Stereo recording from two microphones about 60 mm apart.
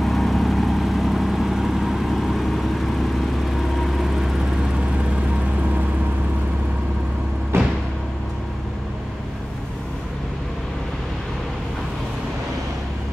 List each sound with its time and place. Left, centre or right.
0.0 s vehicle: centre
7.5 s music: right